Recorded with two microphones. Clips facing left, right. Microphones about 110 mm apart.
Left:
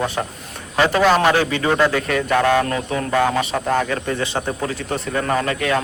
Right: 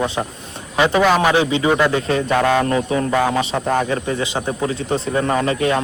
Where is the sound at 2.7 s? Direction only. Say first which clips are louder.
Right 4 dB; 25° right (ahead or behind).